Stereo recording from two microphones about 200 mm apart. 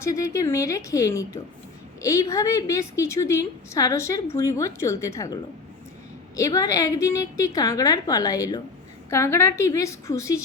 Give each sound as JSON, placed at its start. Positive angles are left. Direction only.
{"t": 0.0, "sound": "a woman's voice", "side_deg": 15}